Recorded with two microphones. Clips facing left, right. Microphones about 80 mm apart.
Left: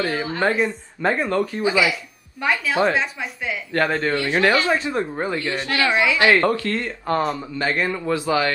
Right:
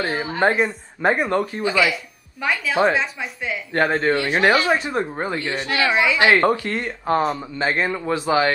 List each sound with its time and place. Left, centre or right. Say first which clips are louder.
0.0 s speech: right 1 dB; right
1.6 s speech: left 1 dB; centre
2.4 s speech: right 1 dB; centre
3.9 s speech: right 2 dB; right
4.2 s speech: left 2 dB; right
5.9 s speech: even; centre
6.1 s speech: right 2 dB; right